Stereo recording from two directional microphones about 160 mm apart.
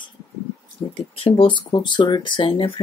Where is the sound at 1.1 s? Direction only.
35° left (ahead or behind).